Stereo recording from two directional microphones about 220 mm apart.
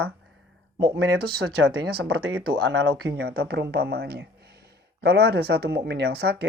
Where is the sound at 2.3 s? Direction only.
70° right (ahead or behind).